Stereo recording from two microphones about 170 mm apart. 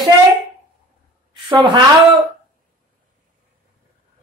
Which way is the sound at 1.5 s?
30° right (ahead or behind).